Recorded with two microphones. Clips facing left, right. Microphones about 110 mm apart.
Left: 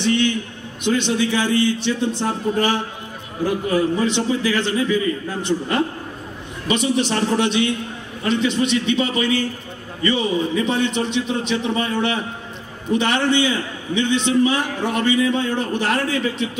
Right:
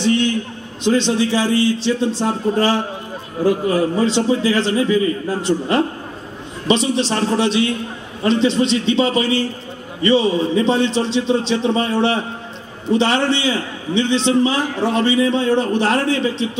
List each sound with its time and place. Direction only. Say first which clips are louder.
0.0 s a sound: right 2 dB; 25° right (ahead or behind)
0.8 s a man's voice: right 3 dB; 30° right (ahead or behind)
6.7 s a man's voice: right 2 dB; 25° right (ahead or behind)